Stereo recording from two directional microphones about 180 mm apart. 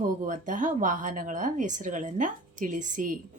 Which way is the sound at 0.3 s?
45° right (ahead or behind).